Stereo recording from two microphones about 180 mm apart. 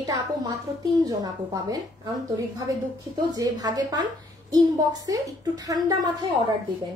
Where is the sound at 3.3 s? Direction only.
20° right (ahead or behind).